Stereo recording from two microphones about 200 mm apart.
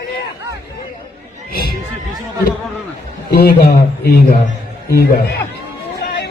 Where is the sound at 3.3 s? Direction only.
50° left (ahead or behind).